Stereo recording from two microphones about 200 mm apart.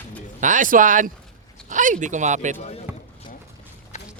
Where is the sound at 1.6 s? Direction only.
40° right (ahead or behind).